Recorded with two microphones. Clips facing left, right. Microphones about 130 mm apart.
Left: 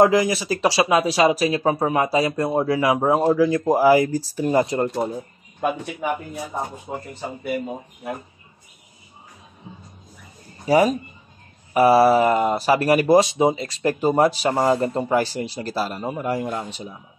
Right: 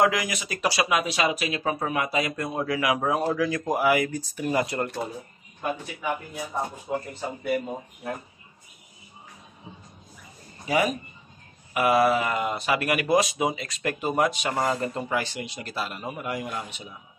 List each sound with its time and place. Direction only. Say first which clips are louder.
0.0 s speech: left 7 dB; 30° left (ahead or behind)
6.9 s speech: right 2 dB; 25° left (ahead or behind)
7.4 s speech: left 1 dB; 5° left (ahead or behind)
10.7 s speech: left 7 dB; 35° left (ahead or behind)